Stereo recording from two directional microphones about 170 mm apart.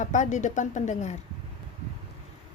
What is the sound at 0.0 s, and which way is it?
A woman's voice, 45° left (ahead or behind).